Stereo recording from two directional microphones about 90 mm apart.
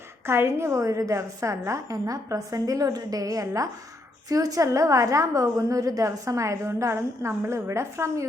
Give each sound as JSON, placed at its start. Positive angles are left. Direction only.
{"t": 0.3, "sound": "a woman's voice", "side_deg": -30}